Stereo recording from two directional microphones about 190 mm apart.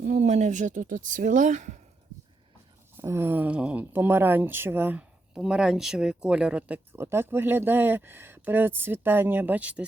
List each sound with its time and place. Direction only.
0.0 s speech: 40° right (ahead or behind)
3.0 s speech: 15° right (ahead or behind)